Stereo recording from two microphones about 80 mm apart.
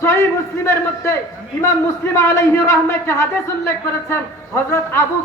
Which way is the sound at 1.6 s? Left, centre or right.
Left.